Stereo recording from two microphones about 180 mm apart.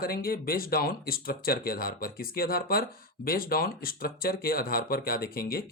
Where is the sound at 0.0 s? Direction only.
55° left (ahead or behind).